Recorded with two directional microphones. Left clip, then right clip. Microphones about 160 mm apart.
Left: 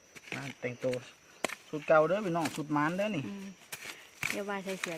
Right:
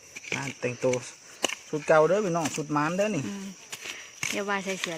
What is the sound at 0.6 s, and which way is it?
Speech, 55° right (ahead or behind).